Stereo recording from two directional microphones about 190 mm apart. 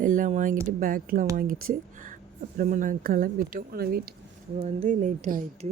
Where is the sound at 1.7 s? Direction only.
45° right (ahead or behind).